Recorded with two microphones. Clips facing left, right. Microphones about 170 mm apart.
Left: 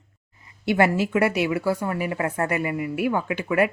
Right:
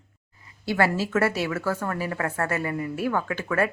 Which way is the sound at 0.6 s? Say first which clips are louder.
Left 3 dB; 20° left (ahead or behind).